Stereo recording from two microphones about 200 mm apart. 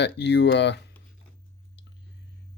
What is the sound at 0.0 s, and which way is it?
Speech, 60° left (ahead or behind).